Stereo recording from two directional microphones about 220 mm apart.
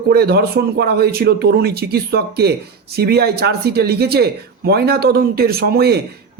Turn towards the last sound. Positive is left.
turn(degrees=-45)  # may be behind; listen again after turning